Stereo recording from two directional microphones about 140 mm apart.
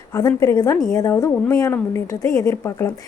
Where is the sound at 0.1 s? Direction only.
25° left (ahead or behind).